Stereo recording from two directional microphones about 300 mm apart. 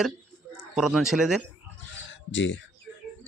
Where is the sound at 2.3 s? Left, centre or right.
Left.